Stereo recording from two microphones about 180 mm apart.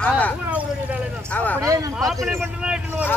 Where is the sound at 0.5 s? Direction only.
10° right (ahead or behind).